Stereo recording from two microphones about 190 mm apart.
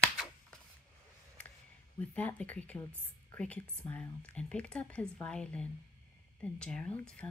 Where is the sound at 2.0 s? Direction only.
10° left (ahead or behind).